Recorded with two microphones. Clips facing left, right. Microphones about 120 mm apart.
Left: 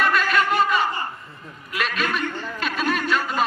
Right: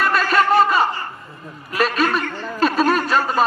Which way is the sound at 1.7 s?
40° right (ahead or behind).